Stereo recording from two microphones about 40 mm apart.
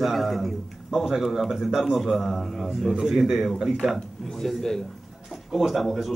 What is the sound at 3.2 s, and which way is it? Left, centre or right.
A man's voice, centre.